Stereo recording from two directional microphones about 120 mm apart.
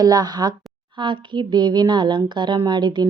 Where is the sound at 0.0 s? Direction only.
30° right (ahead or behind).